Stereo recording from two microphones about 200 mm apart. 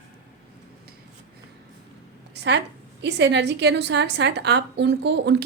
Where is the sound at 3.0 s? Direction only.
60° right (ahead or behind).